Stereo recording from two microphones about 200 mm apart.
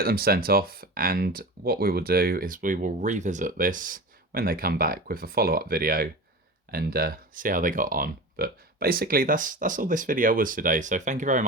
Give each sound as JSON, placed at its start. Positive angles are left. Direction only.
{"t": 0.0, "sound": "speech", "side_deg": -50}